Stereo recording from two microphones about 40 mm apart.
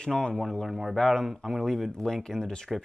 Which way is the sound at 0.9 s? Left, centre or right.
Centre.